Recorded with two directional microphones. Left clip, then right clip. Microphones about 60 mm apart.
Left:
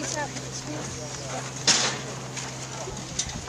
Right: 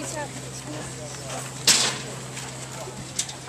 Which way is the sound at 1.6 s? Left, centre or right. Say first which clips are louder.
Right 2 dB; right.